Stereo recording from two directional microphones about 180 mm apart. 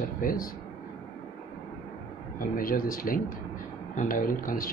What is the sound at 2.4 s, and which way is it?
Speech, 50° left (ahead or behind).